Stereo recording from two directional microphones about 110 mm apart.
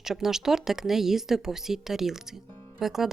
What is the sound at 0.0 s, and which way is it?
A woman's voice, 5° right (ahead or behind).